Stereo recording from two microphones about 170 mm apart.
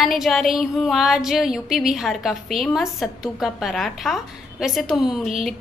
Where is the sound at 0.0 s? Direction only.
Centre (ahead or behind).